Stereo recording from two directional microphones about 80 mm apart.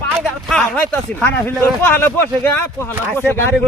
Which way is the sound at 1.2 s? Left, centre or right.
Left.